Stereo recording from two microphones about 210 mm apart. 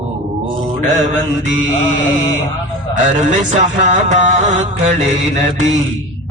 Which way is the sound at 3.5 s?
35° right (ahead or behind).